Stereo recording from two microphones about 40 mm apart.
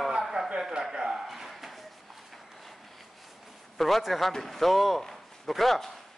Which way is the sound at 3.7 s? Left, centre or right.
Centre.